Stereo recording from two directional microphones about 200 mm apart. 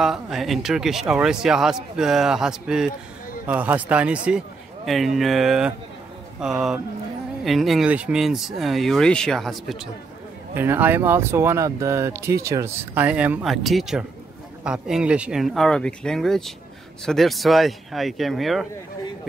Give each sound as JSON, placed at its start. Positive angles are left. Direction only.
{"t": 0.0, "sound": "speech", "side_deg": 0}
{"t": 10.5, "sound": "speech", "side_deg": -10}